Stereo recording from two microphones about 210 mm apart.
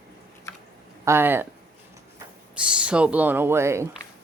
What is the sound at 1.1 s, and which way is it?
Speech, 10° right (ahead or behind).